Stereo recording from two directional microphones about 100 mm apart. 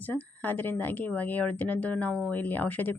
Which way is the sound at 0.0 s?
15° left (ahead or behind).